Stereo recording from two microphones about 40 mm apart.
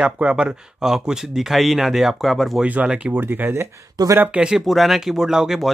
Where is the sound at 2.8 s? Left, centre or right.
Right.